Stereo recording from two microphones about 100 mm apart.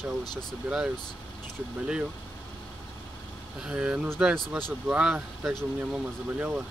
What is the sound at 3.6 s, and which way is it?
Speech, 10° right (ahead or behind).